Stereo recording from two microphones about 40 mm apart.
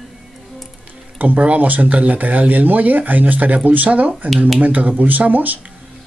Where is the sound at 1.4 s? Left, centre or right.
Right.